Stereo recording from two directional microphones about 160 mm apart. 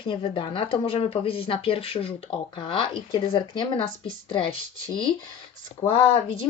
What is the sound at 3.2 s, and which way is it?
Speech, 30° left (ahead or behind).